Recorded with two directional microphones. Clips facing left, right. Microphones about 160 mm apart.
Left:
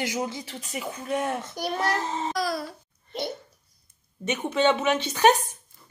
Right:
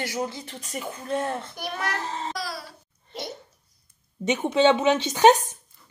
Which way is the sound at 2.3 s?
50° left (ahead or behind).